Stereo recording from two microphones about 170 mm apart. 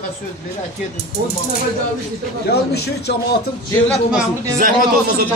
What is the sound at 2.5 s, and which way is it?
Speech, 75° left (ahead or behind).